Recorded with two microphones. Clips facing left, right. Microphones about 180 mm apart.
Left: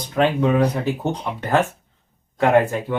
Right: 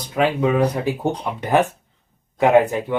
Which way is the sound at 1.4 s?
15° right (ahead or behind).